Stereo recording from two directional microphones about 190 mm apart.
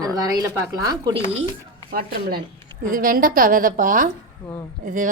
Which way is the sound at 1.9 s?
50° right (ahead or behind).